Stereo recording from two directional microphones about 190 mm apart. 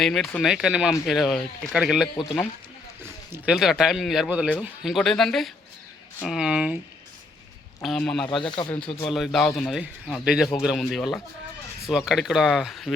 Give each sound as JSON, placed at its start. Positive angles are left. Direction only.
{"t": 0.0, "sound": "speech", "side_deg": 0}
{"t": 3.3, "sound": "speech", "side_deg": -5}
{"t": 7.8, "sound": "speech", "side_deg": 0}
{"t": 8.4, "sound": "speech", "side_deg": 25}
{"t": 9.0, "sound": "speech", "side_deg": 0}